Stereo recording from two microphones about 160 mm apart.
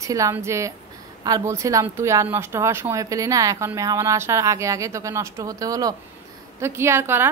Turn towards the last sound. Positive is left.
turn(degrees=-15)  # may be behind; listen again after turning